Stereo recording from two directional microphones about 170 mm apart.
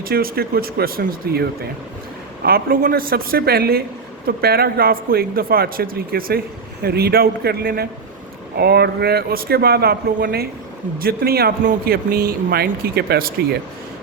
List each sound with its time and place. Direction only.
0.0 s a man's voice: 60° right (ahead or behind)